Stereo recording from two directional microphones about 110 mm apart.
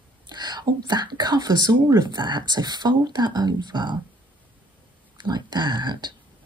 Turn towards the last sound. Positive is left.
turn(degrees=-45)  # may be behind; listen again after turning